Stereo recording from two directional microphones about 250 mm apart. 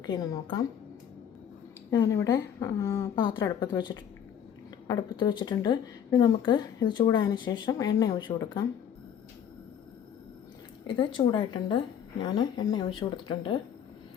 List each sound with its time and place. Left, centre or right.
0.0 s speech: centre
1.9 s speech: centre
10.8 s speech: centre